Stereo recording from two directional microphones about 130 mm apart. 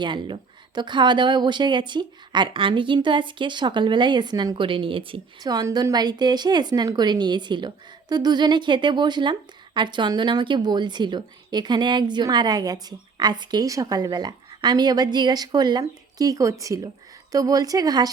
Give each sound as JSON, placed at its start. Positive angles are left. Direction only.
{"t": 0.0, "sound": "speech", "side_deg": -35}
{"t": 5.4, "sound": "speech", "side_deg": -30}